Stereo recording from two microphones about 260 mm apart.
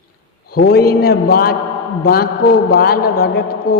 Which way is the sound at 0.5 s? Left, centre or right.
Left.